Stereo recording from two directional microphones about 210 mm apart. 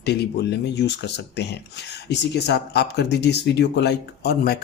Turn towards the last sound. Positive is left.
turn(degrees=45)  # may be behind; listen again after turning